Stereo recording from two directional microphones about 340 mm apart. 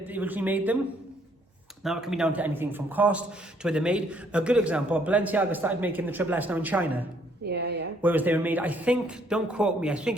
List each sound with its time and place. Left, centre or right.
0.0 s a man's voice: centre
1.8 s a man's voice: centre
7.4 s a woman's voice: right
8.0 s a man's voice: centre